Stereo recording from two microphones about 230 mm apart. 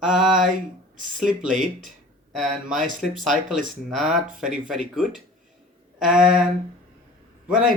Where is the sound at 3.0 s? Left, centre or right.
Centre.